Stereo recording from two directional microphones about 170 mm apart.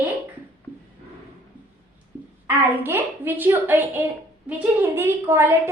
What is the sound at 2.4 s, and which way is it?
A woman's voice, 15° right (ahead or behind).